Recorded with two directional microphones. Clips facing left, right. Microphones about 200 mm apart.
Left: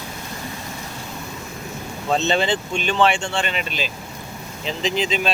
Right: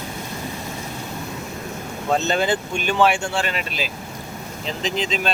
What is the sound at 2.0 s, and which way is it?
Speech, 5° right (ahead or behind).